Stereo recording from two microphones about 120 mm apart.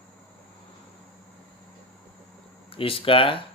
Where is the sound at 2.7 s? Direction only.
50° left (ahead or behind).